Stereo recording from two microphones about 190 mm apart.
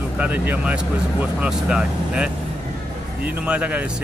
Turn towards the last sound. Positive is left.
turn(degrees=-5)  # may be behind; listen again after turning